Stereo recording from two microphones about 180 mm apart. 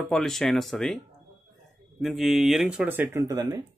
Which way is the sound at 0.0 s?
Centre (ahead or behind).